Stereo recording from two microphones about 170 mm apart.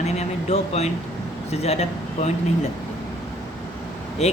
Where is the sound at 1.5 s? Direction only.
40° left (ahead or behind).